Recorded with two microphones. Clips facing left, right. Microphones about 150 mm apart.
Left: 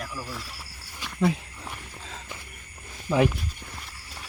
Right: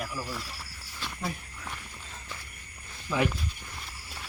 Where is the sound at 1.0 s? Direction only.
15° left (ahead or behind).